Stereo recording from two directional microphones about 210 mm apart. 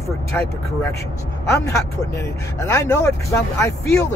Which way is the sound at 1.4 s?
15° left (ahead or behind).